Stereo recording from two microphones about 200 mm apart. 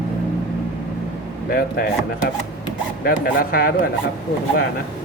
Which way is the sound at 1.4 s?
50° left (ahead or behind).